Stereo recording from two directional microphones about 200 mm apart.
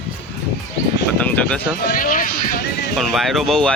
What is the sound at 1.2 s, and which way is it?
Speech, 5° left (ahead or behind).